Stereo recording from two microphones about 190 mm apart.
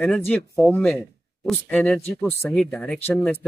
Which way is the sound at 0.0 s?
10° left (ahead or behind).